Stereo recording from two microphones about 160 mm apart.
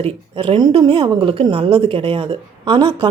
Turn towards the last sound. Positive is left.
turn(degrees=-25)  # may be behind; listen again after turning